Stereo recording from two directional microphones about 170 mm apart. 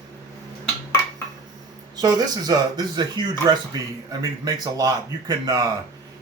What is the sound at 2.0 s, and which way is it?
Speech, 25° right (ahead or behind).